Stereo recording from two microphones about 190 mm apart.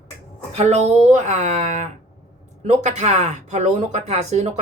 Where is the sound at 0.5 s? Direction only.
35° right (ahead or behind).